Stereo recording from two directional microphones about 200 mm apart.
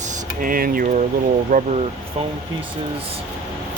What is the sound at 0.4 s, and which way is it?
Speech, 45° right (ahead or behind).